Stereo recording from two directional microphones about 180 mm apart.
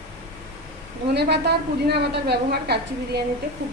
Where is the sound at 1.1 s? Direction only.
65° right (ahead or behind).